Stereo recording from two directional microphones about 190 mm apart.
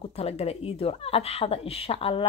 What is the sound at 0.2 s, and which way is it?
A woman's voice, 35° left (ahead or behind).